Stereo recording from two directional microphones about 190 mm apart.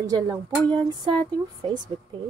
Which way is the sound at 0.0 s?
20° right (ahead or behind).